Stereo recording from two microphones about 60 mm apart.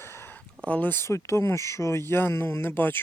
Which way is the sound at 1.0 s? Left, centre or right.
Left.